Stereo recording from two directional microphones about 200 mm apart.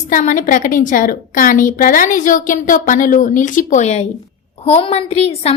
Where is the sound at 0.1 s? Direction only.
40° left (ahead or behind).